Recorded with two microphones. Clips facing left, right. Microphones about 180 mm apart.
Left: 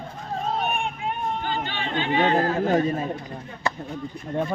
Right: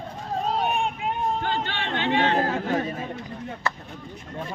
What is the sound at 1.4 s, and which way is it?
Speech, 75° right (ahead or behind).